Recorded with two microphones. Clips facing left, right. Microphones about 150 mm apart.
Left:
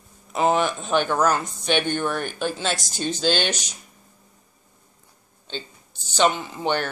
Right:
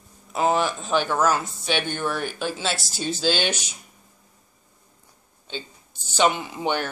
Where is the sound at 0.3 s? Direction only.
Centre (ahead or behind).